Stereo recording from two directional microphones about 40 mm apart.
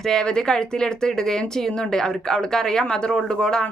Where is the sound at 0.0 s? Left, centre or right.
Centre.